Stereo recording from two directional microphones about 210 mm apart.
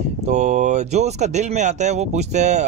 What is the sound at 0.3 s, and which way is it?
Speech, 35° right (ahead or behind).